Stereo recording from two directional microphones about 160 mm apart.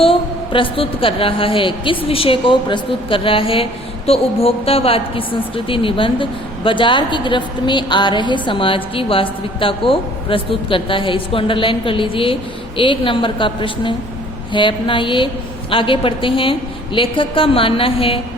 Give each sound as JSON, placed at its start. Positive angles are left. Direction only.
{"t": 0.0, "sound": "a woman's voice", "side_deg": 35}